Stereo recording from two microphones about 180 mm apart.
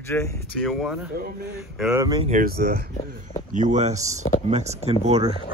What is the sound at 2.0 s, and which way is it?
Speech, 20° right (ahead or behind).